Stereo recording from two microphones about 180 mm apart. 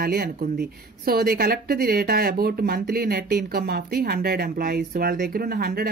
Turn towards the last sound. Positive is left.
turn(degrees=-60)  # may be behind; listen again after turning